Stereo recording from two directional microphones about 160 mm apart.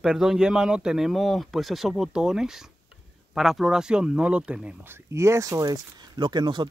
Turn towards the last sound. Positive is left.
turn(degrees=-30)  # may be behind; listen again after turning